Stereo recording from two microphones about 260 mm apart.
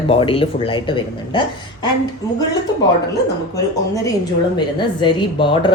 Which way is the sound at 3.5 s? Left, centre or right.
Centre.